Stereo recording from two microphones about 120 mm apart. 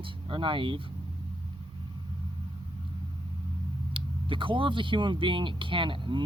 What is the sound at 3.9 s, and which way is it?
Speech, 45° right (ahead or behind).